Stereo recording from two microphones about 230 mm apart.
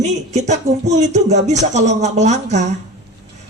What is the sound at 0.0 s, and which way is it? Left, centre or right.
Speech, right.